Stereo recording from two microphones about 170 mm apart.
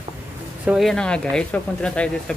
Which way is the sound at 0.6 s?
Centre (ahead or behind).